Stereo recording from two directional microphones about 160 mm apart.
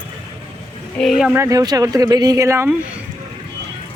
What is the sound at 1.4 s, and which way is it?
Speech, 20° right (ahead or behind).